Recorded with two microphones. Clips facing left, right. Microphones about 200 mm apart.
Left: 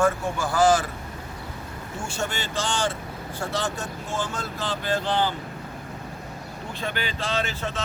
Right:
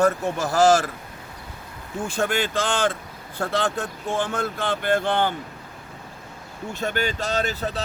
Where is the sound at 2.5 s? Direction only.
55° right (ahead or behind).